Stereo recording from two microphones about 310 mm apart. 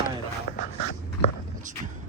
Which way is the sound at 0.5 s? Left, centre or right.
Left.